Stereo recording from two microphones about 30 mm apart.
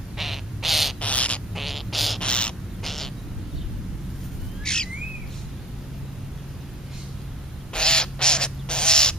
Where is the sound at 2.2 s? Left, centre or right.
Left.